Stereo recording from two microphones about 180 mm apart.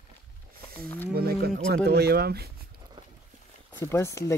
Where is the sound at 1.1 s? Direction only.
60° right (ahead or behind).